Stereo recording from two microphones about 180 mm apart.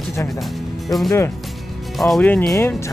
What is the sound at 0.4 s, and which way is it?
Speech, centre (ahead or behind).